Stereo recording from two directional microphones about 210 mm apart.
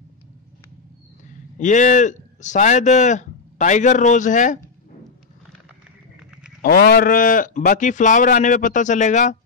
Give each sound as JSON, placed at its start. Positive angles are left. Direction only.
{"t": 1.6, "sound": "speech", "side_deg": 35}
{"t": 6.6, "sound": "speech", "side_deg": 45}